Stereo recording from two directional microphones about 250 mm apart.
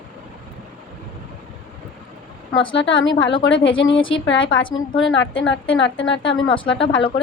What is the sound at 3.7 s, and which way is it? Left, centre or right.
Speech, left.